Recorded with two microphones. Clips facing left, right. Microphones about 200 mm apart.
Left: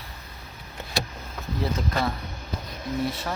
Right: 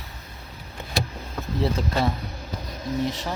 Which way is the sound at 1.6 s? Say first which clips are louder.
Right 3 dB; 30° right (ahead or behind).